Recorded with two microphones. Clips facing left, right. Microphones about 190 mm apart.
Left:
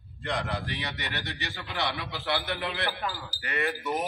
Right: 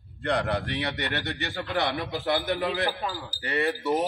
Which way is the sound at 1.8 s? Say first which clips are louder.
Right 4 dB; 50° right (ahead or behind).